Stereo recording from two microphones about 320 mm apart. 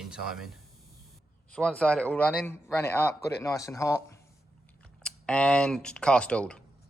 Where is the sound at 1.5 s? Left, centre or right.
Centre.